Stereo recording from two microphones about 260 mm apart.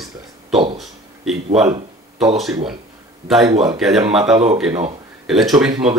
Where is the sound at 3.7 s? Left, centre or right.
Centre.